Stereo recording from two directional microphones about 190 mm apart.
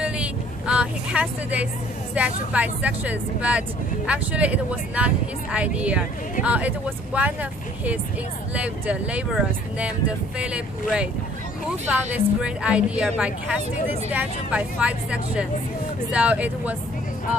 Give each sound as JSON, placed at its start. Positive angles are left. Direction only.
{"t": 0.0, "sound": "vehicle", "side_deg": -5}
{"t": 2.1, "sound": "speech", "side_deg": -5}
{"t": 8.5, "sound": "a woman's voice", "side_deg": -5}